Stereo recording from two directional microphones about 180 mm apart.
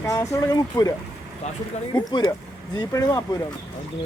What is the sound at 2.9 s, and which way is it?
Speech, 15° left (ahead or behind).